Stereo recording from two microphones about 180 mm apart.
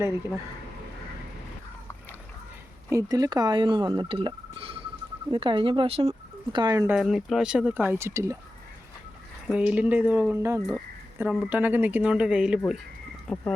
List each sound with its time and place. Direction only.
2.9 s speech: 20° right (ahead or behind)
6.8 s speech: centre (ahead or behind)
9.5 s speech: 5° right (ahead or behind)
13.2 s speech: 15° left (ahead or behind)